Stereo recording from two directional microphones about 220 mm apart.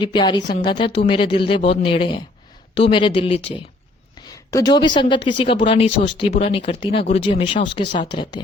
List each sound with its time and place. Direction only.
0.0 s speech: 20° left (ahead or behind)
4.5 s speech: 20° left (ahead or behind)